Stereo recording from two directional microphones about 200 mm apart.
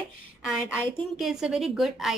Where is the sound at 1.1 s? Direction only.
Centre (ahead or behind).